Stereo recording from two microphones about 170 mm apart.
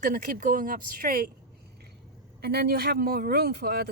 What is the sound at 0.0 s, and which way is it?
Speech, 50° right (ahead or behind).